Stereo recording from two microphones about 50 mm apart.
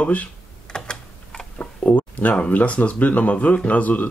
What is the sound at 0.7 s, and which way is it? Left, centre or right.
Typing, centre.